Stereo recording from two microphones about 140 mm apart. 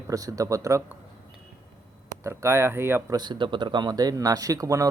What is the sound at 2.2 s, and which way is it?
Speech, 20° right (ahead or behind).